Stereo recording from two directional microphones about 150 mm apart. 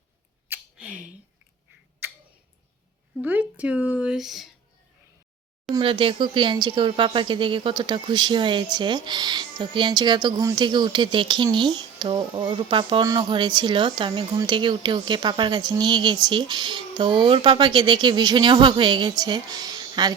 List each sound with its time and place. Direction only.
0.4 s a sound: 10° right (ahead or behind)
2.0 s tick-tock: 15° right (ahead or behind)
3.2 s speech: 10° right (ahead or behind)
5.8 s speech: 35° right (ahead or behind)